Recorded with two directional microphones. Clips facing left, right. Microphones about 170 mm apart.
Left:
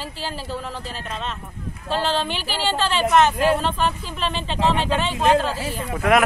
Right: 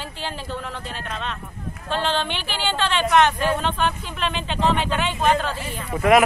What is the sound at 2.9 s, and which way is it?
Speech, centre (ahead or behind).